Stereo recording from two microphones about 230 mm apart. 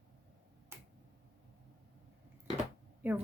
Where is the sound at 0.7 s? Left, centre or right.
Centre.